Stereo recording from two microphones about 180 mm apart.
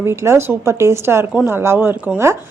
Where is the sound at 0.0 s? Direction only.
15° right (ahead or behind).